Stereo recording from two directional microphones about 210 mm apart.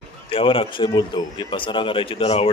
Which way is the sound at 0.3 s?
25° left (ahead or behind).